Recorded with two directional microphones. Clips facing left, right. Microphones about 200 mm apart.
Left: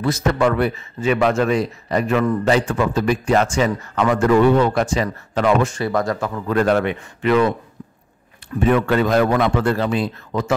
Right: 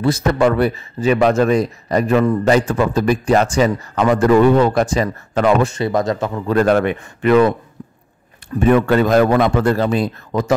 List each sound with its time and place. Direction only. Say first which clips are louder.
0.0 s speech: right 3 dB; 35° right (ahead or behind)
5.8 s speech: right 3 dB; 20° right (ahead or behind)
6.5 s speech: right 3 dB; 45° right (ahead or behind)
8.5 s speech: right 3 dB; 45° right (ahead or behind)